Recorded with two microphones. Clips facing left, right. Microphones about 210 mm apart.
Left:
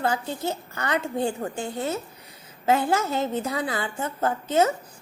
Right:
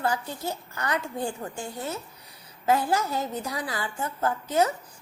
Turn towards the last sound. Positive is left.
turn(degrees=25)  # may be behind; listen again after turning